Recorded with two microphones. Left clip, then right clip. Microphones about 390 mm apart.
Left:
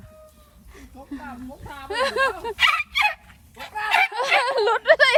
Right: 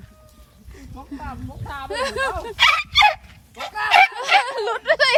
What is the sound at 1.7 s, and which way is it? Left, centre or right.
Speech, centre.